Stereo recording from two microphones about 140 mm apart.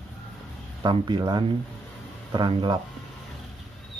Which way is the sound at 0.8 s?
30° right (ahead or behind).